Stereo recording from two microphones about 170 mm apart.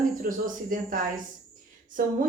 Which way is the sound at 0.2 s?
55° right (ahead or behind).